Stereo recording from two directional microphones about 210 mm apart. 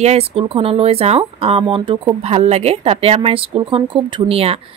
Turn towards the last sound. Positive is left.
turn(degrees=-30)  # may be behind; listen again after turning